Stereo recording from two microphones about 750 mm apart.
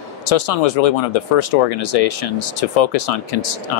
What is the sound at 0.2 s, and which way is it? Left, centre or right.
Speech, left.